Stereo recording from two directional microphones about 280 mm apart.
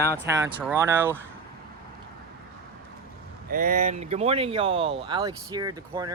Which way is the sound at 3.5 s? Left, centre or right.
Right.